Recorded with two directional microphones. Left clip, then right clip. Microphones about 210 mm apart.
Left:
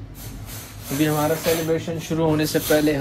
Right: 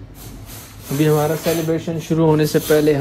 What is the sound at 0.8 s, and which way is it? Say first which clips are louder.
Speech: right 5 dB; 30° right (ahead or behind).